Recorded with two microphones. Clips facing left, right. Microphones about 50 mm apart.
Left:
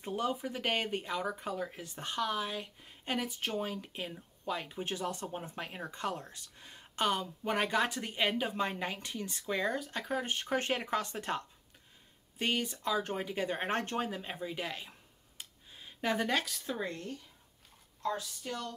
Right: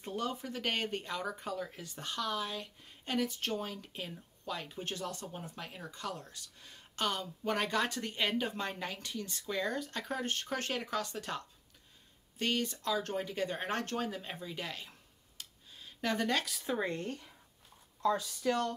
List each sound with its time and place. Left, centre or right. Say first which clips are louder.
0.0 s speech: left 3 dB; centre
9.8 s speech: left 2 dB; centre; by 11.4 s left
12.4 s speech: even; centre
13.6 s speech: left 2 dB; left; by 16.4 s centre
16.4 s speech: right 1 dB; centre